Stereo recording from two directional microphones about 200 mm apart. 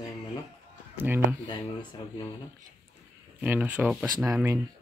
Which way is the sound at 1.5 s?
25° left (ahead or behind).